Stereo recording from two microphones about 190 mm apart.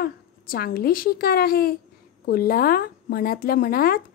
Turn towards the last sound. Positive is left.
turn(degrees=50)  # may be behind; listen again after turning